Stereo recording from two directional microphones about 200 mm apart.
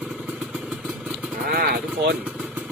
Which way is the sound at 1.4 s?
50° right (ahead or behind).